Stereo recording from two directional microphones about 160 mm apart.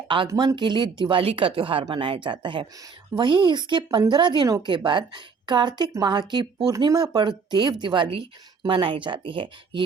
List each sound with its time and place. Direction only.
0.3 s a woman's voice: 25° right (ahead or behind)